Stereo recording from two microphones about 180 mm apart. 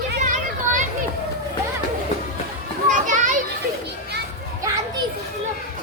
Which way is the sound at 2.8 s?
45° right (ahead or behind).